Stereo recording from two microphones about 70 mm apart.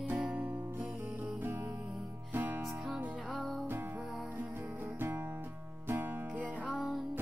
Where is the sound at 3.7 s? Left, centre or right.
Right.